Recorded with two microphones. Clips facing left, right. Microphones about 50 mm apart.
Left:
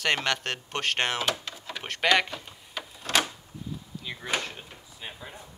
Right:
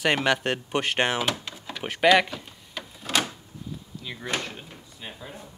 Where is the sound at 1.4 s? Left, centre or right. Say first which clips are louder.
Right 3 dB; centre.